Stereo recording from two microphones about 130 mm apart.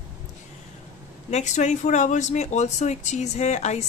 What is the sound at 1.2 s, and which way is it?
A woman's voice, 60° left (ahead or behind).